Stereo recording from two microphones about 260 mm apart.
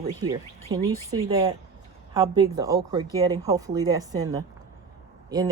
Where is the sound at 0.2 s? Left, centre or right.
Centre.